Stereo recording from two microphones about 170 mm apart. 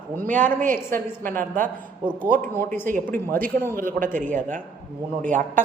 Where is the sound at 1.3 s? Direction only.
50° right (ahead or behind).